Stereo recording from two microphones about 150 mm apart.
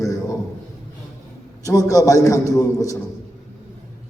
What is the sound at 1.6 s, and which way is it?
A man's voice, 20° left (ahead or behind).